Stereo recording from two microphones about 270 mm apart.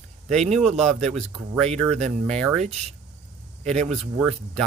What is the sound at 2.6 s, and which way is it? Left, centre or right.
Speech, right.